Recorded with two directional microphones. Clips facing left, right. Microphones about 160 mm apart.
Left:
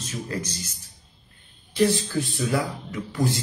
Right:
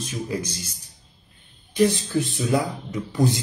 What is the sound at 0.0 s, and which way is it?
Speech, 10° right (ahead or behind).